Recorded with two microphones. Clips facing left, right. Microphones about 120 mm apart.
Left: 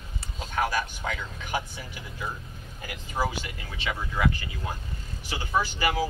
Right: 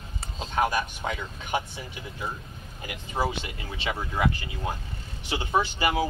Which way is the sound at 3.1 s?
25° right (ahead or behind).